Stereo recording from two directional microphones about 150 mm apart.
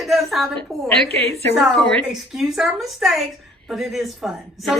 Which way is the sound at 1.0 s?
40° right (ahead or behind).